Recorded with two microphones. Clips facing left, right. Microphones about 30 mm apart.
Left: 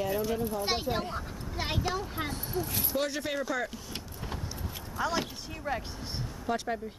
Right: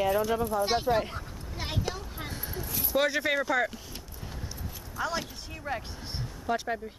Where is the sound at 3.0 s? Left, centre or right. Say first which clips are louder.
Right 8 dB; right.